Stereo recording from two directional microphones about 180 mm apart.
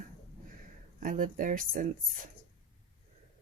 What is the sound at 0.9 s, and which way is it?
Speech, 45° right (ahead or behind).